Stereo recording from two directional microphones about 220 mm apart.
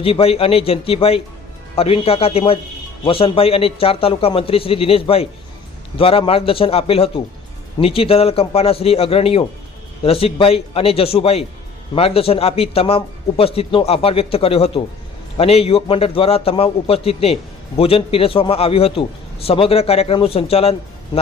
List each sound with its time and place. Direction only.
0.0 s speech: 25° left (ahead or behind)